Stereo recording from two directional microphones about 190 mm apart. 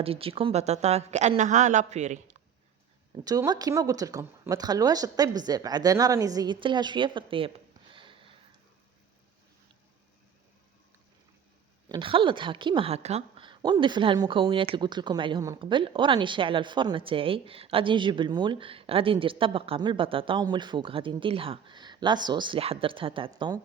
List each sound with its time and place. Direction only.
0.0 s a woman's voice: 30° right (ahead or behind)
3.2 s a woman's voice: 20° right (ahead or behind)
7.9 s sniff: 25° right (ahead or behind)
11.9 s a woman's voice: 25° right (ahead or behind)